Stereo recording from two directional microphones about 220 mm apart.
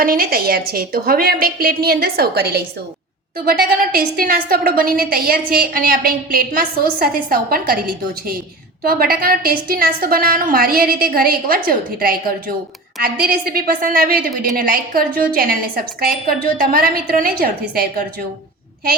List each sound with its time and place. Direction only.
0.0 s a woman's voice: 40° right (ahead or behind)